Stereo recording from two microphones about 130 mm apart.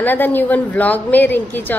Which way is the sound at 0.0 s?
15° left (ahead or behind).